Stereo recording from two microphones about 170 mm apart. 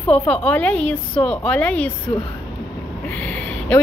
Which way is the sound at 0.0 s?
5° left (ahead or behind).